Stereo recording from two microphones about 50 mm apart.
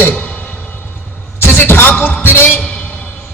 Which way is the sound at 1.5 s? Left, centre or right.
Left.